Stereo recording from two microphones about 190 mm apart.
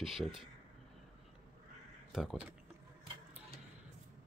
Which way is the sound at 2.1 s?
Centre (ahead or behind).